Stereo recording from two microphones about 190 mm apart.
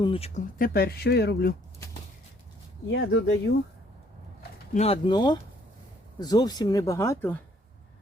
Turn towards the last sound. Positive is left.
turn(degrees=10)  # may be behind; listen again after turning